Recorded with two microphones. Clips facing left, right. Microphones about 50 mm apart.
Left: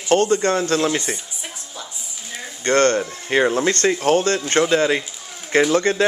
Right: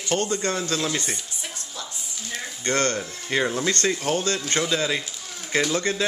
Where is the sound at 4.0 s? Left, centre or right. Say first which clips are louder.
Left 7 dB; left.